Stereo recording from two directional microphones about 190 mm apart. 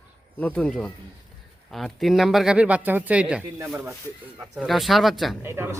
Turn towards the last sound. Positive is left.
turn(degrees=-10)  # may be behind; listen again after turning